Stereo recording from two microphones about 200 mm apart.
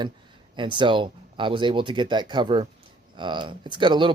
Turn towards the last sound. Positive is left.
turn(degrees=-25)  # may be behind; listen again after turning